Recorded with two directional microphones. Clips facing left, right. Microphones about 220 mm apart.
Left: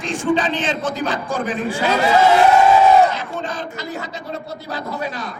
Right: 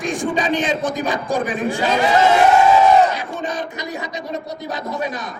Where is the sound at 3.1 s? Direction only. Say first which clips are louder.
Right 1 dB; 15° right (ahead or behind).